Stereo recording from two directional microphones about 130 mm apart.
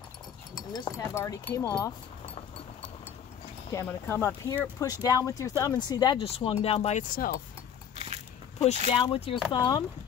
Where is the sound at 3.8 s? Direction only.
20° left (ahead or behind).